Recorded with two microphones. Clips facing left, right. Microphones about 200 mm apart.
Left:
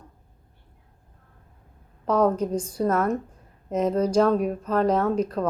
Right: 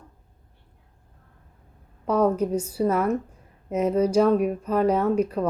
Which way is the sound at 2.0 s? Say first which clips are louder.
Even; 10° right (ahead or behind).